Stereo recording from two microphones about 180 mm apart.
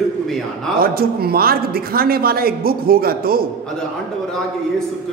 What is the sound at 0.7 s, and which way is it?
A man's voice, 55° right (ahead or behind).